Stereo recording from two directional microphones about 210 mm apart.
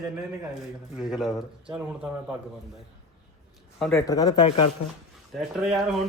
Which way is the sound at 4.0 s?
15° left (ahead or behind).